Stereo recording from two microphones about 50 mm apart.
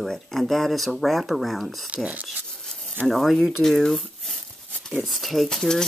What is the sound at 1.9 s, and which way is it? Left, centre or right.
Speech, right.